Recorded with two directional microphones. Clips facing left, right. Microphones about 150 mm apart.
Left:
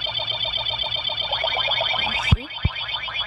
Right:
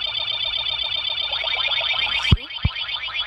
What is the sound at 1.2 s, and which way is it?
Alarm, 50° left (ahead or behind).